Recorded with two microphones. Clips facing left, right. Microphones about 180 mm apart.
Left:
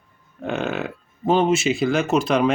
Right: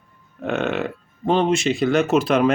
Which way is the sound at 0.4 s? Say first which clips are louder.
Right 2 dB; centre (ahead or behind).